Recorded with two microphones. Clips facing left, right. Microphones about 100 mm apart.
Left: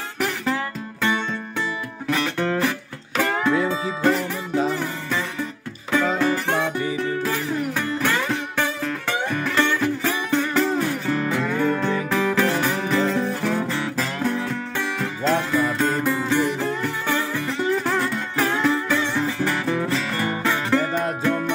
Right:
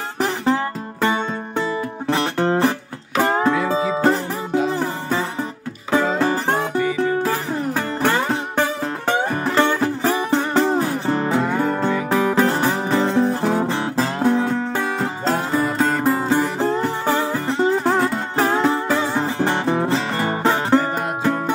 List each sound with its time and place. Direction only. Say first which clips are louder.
2.0 s music: right 3 dB; 30° right (ahead or behind)